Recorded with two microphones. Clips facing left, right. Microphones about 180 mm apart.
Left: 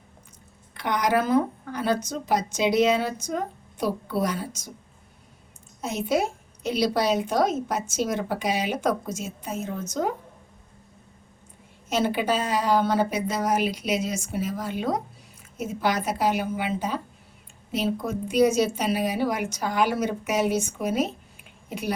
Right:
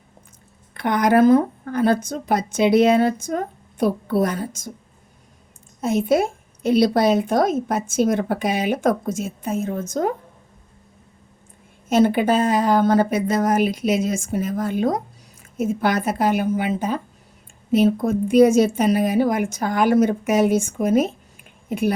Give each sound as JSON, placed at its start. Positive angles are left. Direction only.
{"t": 0.7, "sound": "a woman's voice", "side_deg": -50}
{"t": 5.8, "sound": "a woman's voice", "side_deg": -50}
{"t": 11.9, "sound": "a woman's voice", "side_deg": -50}